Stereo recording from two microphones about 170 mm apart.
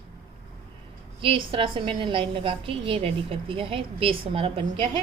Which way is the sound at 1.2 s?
30° right (ahead or behind).